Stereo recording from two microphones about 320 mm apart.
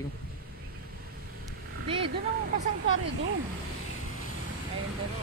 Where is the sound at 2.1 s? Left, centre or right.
Right.